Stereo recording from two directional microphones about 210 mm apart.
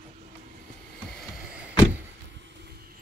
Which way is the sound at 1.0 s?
Centre (ahead or behind).